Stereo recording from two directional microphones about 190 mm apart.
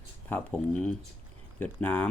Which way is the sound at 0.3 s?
10° left (ahead or behind).